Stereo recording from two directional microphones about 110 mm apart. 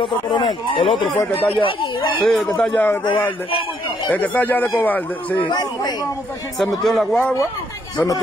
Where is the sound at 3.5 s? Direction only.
55° left (ahead or behind).